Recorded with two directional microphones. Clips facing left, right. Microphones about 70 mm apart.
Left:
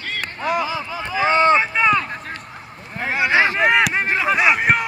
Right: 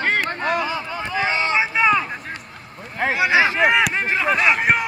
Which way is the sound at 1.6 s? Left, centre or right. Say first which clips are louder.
Even; centre.